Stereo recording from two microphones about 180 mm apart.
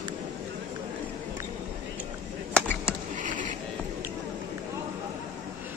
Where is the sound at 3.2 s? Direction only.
45° right (ahead or behind).